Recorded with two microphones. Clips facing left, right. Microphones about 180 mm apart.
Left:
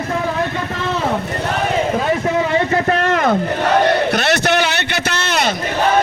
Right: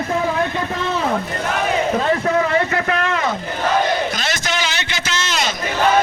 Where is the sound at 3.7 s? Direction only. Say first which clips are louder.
Left 5 dB; 65° left (ahead or behind).